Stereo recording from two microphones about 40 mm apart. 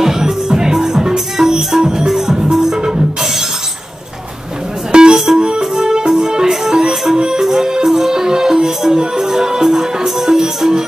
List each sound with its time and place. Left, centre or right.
0.0 s music: centre
4.9 s music: centre